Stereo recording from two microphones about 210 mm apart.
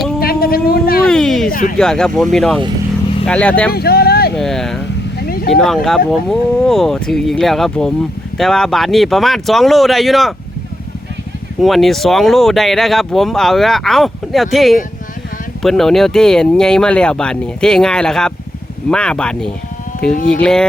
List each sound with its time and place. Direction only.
0.2 s a sound: 45° left (ahead or behind)
1.0 s a sound: centre (ahead or behind)
1.5 s a sound: 40° left (ahead or behind)
1.8 s speech: 5° left (ahead or behind)
3.7 s speech: 45° left (ahead or behind)
4.4 s speech: centre (ahead or behind)
5.2 s vehicle: 45° left (ahead or behind)
5.6 s speech: centre (ahead or behind)
11.6 s speech: centre (ahead or behind)